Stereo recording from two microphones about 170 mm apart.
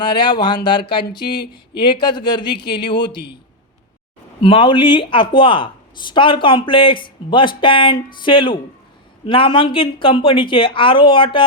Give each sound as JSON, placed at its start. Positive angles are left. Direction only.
{"t": 0.0, "sound": "speech", "side_deg": 25}
{"t": 4.4, "sound": "a woman's voice", "side_deg": 30}